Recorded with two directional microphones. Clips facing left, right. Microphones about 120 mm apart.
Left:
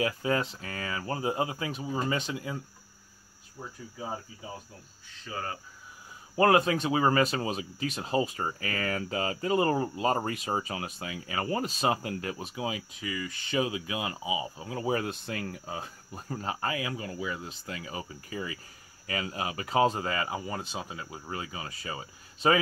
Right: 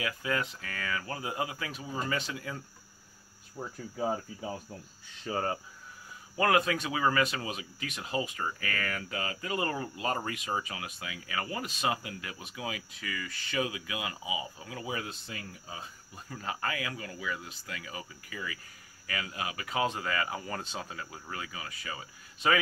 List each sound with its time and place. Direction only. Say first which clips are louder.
0.0 s speech: left 5 dB; 30° left (ahead or behind)
5.2 s cricket: right 5 dB; 35° right (ahead or behind)
6.3 s speech: left 4 dB; 30° left (ahead or behind)
14.9 s speech: left 8 dB; 50° left (ahead or behind)
16.3 s speech: left 3 dB; 30° left (ahead or behind)